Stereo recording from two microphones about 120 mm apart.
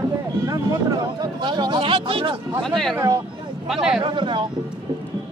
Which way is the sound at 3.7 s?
5° right (ahead or behind).